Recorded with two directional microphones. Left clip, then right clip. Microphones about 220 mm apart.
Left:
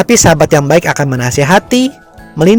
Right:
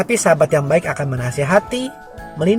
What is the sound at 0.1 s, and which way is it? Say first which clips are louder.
Speech: left 5 dB; 45° left (ahead or behind).